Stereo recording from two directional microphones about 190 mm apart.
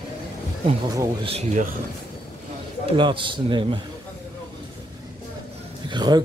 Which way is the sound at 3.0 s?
25° right (ahead or behind).